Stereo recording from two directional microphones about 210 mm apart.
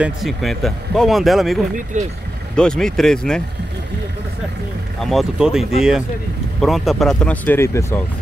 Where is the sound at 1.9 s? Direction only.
35° right (ahead or behind).